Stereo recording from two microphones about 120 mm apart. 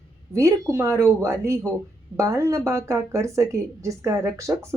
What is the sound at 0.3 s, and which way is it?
Speech, 25° right (ahead or behind).